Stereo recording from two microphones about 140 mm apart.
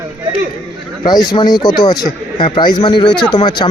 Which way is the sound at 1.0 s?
30° left (ahead or behind).